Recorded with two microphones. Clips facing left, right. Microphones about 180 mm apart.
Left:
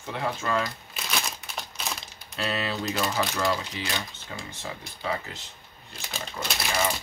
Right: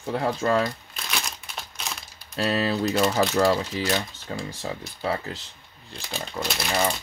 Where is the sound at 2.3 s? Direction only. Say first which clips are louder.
Right 6 dB; 35° right (ahead or behind).